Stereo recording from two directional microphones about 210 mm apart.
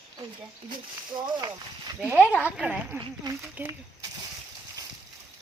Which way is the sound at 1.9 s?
10° right (ahead or behind).